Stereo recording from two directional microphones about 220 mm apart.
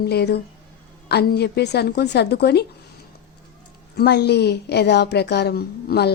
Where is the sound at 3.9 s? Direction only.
45° left (ahead or behind).